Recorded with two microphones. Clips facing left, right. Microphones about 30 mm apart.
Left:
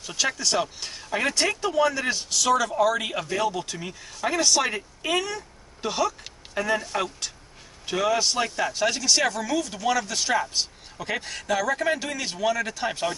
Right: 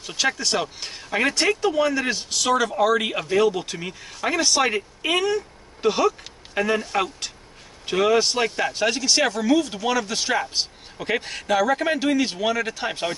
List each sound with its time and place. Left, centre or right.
0.0 s speech: centre